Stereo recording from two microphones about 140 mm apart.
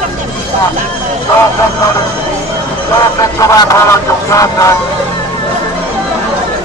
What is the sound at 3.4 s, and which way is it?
Speech, 25° left (ahead or behind).